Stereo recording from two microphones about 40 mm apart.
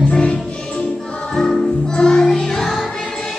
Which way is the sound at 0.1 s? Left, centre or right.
Left.